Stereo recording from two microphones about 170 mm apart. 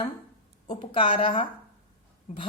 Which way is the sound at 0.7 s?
30° left (ahead or behind).